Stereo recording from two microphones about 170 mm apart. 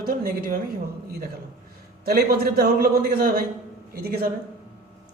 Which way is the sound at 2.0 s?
65° right (ahead or behind).